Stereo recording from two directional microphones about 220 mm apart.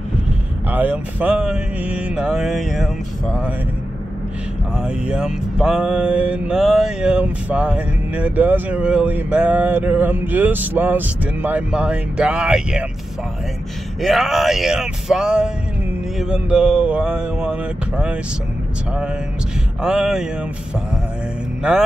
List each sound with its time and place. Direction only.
0.7 s mantra: 5° right (ahead or behind)
4.7 s mantra: 5° right (ahead or behind)
14.0 s mantra: centre (ahead or behind)
19.8 s mantra: 5° right (ahead or behind)